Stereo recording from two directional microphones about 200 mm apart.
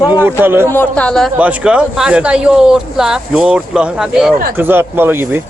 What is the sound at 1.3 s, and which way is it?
Speech, 5° right (ahead or behind).